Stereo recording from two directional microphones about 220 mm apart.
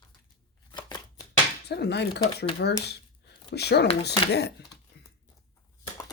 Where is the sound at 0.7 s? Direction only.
20° left (ahead or behind).